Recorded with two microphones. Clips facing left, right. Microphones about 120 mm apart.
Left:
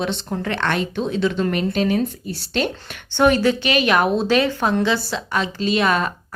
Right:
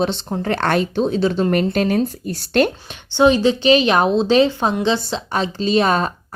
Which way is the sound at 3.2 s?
20° right (ahead or behind).